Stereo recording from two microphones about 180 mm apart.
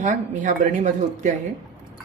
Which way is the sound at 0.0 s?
45° right (ahead or behind).